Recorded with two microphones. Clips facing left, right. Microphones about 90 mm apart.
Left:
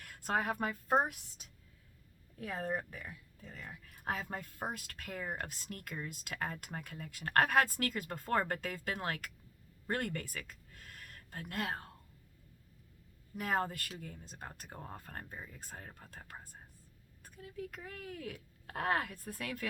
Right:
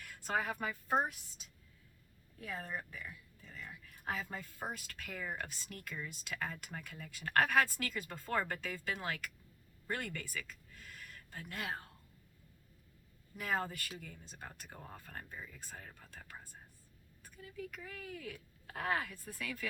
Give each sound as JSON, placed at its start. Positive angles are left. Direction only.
{"t": 0.0, "sound": "a woman's voice", "side_deg": 50}
{"t": 2.4, "sound": "speech", "side_deg": 45}
{"t": 13.3, "sound": "speech", "side_deg": 50}